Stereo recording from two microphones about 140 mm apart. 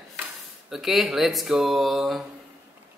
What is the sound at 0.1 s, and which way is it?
Speech, 5° right (ahead or behind).